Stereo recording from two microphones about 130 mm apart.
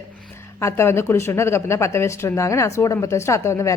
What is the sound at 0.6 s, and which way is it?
Speech, 20° left (ahead or behind).